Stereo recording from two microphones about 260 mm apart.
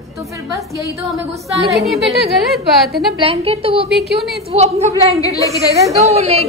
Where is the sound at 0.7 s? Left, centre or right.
Centre.